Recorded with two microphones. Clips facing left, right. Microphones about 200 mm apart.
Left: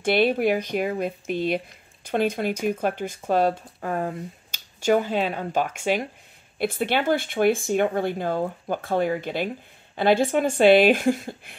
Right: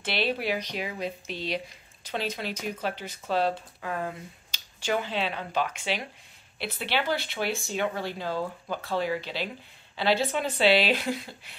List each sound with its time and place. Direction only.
0.0 s speech: 50° left (ahead or behind)